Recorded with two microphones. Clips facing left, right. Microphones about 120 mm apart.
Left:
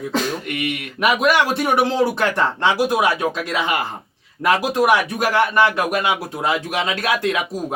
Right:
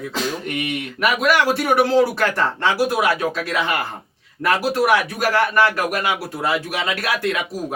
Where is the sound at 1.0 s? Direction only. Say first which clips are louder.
Left 1 dB; 20° left (ahead or behind).